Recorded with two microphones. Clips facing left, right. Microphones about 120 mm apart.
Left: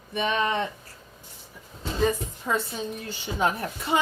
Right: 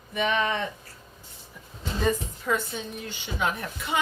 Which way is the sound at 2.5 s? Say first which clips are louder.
Even; 25° left (ahead or behind).